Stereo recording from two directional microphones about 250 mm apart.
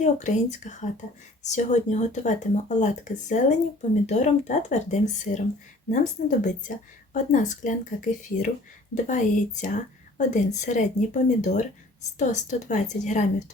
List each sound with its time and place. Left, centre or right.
0.0 s a woman's voice: left